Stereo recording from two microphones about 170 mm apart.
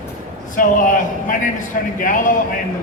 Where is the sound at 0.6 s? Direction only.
50° left (ahead or behind).